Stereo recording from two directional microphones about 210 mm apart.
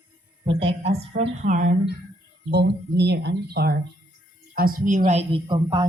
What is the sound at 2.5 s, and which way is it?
A woman's voice, 50° right (ahead or behind).